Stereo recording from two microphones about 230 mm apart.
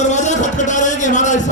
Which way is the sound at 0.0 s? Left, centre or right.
Left.